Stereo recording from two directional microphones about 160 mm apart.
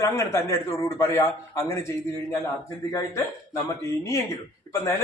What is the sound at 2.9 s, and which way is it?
A man's voice, 20° left (ahead or behind).